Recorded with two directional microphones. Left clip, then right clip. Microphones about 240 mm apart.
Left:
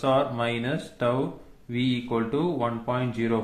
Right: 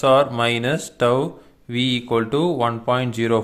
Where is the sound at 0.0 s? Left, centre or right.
Right.